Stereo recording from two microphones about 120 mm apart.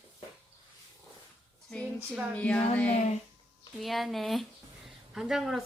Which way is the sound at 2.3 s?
10° left (ahead or behind).